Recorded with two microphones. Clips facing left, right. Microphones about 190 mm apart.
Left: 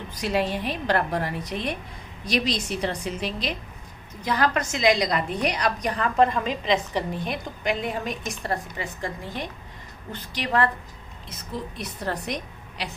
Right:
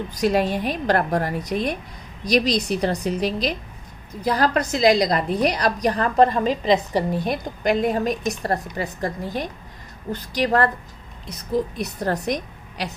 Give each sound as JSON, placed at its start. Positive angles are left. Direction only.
{"t": 0.2, "sound": "a woman's voice", "side_deg": -45}